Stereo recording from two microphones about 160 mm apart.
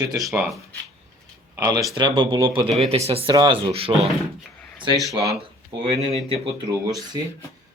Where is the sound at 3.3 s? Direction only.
25° right (ahead or behind).